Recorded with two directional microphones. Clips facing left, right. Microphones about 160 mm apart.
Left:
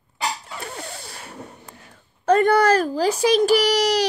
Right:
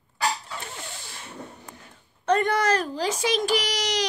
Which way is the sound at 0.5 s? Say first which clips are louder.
Left 4 dB; 35° left (ahead or behind).